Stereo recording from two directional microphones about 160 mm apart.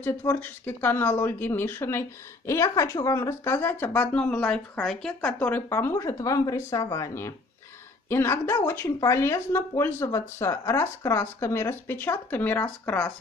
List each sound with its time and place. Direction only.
0.0 s speech: 15° left (ahead or behind)